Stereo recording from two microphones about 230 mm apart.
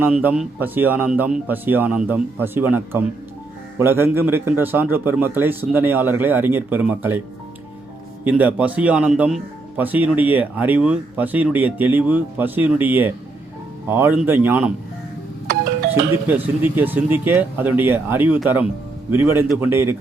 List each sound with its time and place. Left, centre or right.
0.0 s speech: centre
8.2 s speech: centre
16.2 s speech: centre